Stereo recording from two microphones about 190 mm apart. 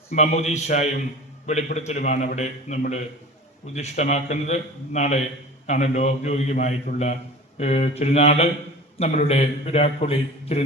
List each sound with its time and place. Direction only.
0.1 s a man's voice: 35° left (ahead or behind)